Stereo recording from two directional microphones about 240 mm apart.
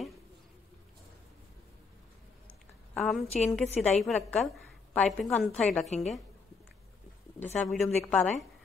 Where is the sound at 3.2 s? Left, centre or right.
Left.